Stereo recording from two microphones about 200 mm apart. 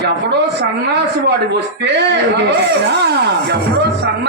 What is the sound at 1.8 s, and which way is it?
Speech, 60° right (ahead or behind).